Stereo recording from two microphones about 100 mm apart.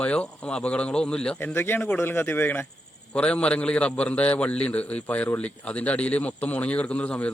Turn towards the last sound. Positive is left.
turn(degrees=10)  # may be behind; listen again after turning